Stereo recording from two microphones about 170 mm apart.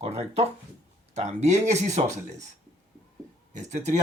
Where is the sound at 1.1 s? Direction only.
40° right (ahead or behind).